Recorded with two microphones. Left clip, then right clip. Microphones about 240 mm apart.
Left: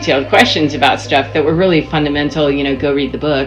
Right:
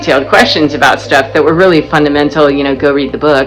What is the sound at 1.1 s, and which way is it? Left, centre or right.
Speech, centre.